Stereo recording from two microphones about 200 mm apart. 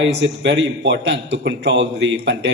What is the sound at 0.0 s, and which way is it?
A man's voice, 60° right (ahead or behind).